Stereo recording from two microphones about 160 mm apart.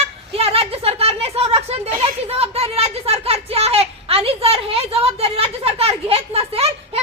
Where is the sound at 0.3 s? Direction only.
35° right (ahead or behind).